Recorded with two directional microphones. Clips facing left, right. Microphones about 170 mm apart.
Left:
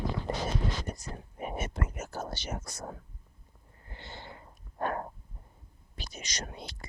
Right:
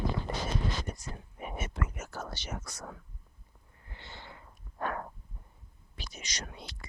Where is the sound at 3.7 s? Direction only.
35° left (ahead or behind).